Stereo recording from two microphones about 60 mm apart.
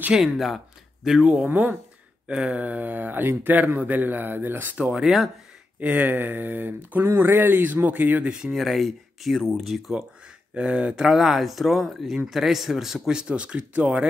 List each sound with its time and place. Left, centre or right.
0.1 s speech: centre
1.2 s speech: right
2.2 s a sound: centre
2.6 s speech: right
5.0 s speech: centre
5.8 s speech: right
8.3 s speech: centre
8.5 s speech: centre
10.5 s speech: centre
11.1 s speech: centre; by 14.0 s right